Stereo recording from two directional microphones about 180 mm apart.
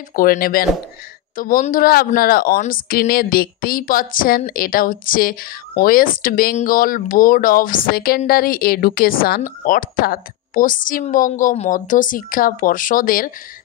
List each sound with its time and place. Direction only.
0.1 s speech: 55° left (ahead or behind)